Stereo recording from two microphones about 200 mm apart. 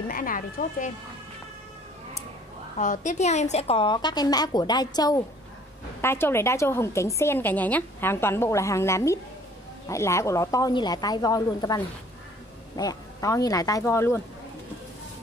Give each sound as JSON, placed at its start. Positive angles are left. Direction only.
{"t": 0.1, "sound": "speech", "side_deg": 45}
{"t": 2.8, "sound": "a woman's voice", "side_deg": 40}